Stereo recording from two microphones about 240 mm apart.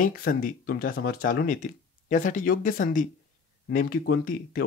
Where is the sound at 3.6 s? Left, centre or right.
Left.